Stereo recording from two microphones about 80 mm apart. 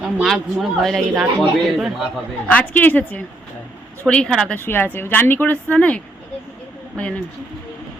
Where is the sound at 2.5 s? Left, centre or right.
Centre.